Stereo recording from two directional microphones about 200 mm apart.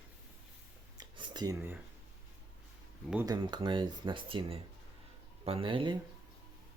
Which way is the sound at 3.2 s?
20° right (ahead or behind).